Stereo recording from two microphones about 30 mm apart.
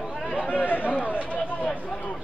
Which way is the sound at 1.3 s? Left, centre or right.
Left.